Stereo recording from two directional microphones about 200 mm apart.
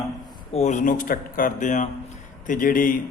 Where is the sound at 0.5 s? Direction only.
35° left (ahead or behind).